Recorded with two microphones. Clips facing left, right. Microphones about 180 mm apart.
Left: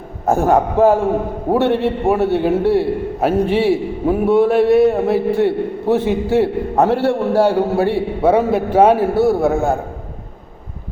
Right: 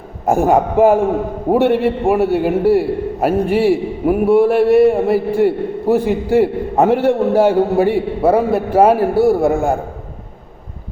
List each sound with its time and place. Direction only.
0.3 s a man's voice: 15° right (ahead or behind)
6.4 s a man's voice: 15° right (ahead or behind)
8.3 s a man's voice: 5° right (ahead or behind)